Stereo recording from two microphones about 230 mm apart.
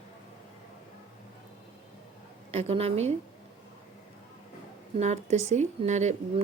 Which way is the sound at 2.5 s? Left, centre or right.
Right.